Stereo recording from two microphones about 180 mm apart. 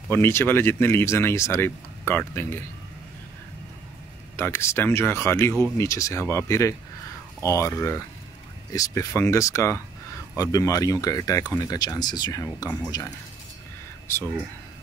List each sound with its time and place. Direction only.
0.1 s speech: 15° left (ahead or behind)
4.4 s speech: 15° left (ahead or behind)